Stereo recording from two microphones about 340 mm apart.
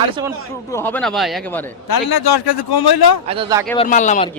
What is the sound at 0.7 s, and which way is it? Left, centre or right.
Speech, centre.